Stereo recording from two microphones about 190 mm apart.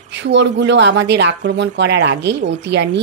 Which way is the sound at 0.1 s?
70° right (ahead or behind).